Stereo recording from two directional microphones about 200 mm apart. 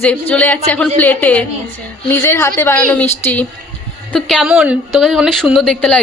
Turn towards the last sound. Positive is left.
turn(degrees=5)  # may be behind; listen again after turning